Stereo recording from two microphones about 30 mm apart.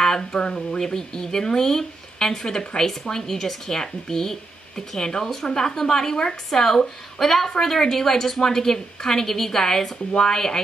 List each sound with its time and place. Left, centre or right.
0.3 s speech: left
0.6 s a woman's voice: centre